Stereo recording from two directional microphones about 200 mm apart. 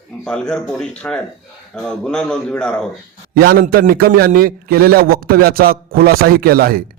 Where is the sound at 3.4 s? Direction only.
50° right (ahead or behind).